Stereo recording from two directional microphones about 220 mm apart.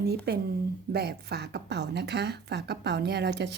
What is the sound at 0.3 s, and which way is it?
Speech, 50° right (ahead or behind).